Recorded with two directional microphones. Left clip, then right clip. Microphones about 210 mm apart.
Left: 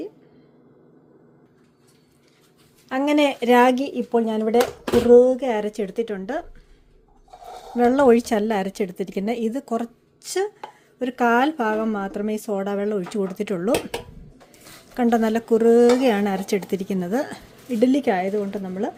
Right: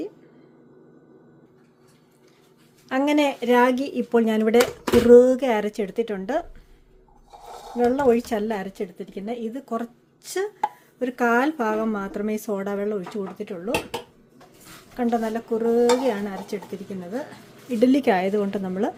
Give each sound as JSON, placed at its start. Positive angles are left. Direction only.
{"t": 2.9, "sound": "a woman's voice", "side_deg": 0}
{"t": 3.4, "sound": "a woman's voice", "side_deg": 25}
{"t": 4.1, "sound": "a woman's voice", "side_deg": -10}
{"t": 7.8, "sound": "a woman's voice", "side_deg": 25}
{"t": 14.9, "sound": "dishes", "side_deg": 35}
{"t": 17.8, "sound": "a woman's voice", "side_deg": 0}